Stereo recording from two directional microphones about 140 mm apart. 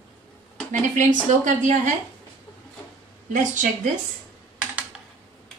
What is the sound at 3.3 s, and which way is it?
Speech, 65° right (ahead or behind).